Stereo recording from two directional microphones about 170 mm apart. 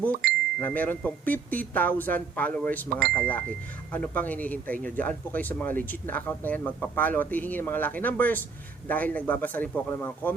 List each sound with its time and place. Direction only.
0.1 s speech: 65° right (ahead or behind)
0.6 s speech: 10° left (ahead or behind)